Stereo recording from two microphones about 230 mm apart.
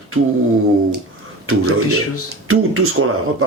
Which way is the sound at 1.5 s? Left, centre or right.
Right.